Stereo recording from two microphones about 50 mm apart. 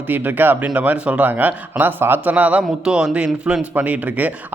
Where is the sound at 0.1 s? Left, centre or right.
Right.